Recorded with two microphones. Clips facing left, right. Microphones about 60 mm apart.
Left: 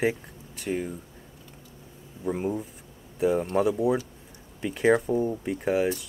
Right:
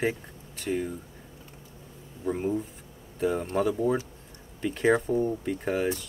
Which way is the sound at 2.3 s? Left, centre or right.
Centre.